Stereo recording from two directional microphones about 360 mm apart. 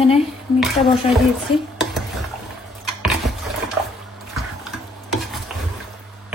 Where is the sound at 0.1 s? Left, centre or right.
Centre.